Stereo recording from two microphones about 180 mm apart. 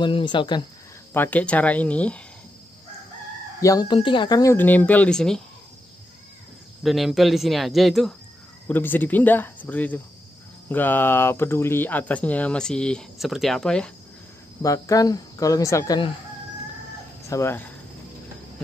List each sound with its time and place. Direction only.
0.0 s speech: 25° left (ahead or behind)
1.1 s speech: 10° left (ahead or behind)
3.6 s speech: 20° left (ahead or behind); by 5.4 s 5° left (ahead or behind)
6.8 s speech: centre (ahead or behind)
14.6 s speech: 20° left (ahead or behind)
17.3 s speech: 15° left (ahead or behind)